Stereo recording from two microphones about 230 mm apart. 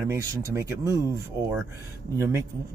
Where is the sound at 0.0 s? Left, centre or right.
Centre.